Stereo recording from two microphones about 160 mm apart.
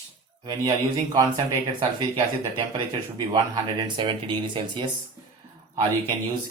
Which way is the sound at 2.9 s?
25° right (ahead or behind).